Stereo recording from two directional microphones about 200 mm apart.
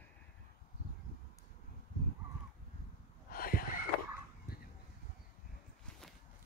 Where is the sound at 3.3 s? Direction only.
45° left (ahead or behind).